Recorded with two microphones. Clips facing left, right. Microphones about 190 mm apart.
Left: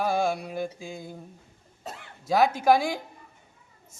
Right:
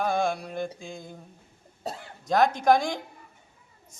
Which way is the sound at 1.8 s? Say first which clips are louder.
Right 5 dB; 35° right (ahead or behind).